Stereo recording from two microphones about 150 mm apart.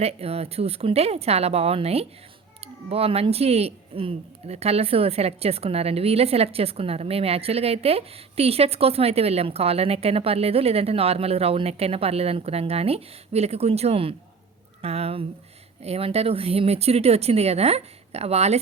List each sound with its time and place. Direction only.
0.0 s speech: 40° right (ahead or behind)